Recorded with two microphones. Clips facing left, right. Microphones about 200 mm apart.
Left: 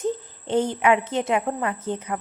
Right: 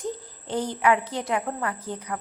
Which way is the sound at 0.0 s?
25° left (ahead or behind).